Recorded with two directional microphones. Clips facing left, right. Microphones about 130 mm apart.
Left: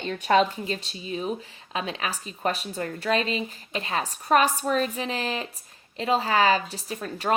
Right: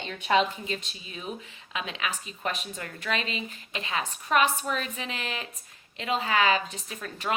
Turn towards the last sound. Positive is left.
turn(degrees=35)  # may be behind; listen again after turning